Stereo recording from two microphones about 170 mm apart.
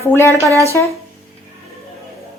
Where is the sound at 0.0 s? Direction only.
15° left (ahead or behind).